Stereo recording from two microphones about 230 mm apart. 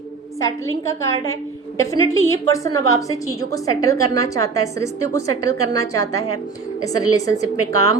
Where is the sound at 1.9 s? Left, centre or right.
Centre.